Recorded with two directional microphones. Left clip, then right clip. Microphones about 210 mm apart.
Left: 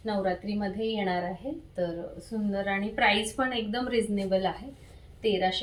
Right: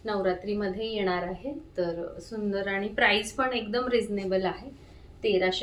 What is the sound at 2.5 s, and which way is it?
A woman's voice, 20° right (ahead or behind).